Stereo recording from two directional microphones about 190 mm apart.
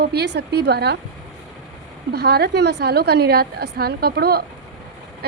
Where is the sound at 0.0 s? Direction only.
60° right (ahead or behind).